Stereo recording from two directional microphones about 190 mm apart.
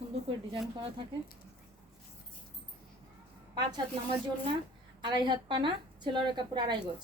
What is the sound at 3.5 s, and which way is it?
Speech, 25° right (ahead or behind).